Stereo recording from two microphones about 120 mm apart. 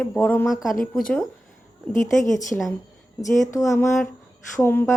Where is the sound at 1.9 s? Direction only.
90° left.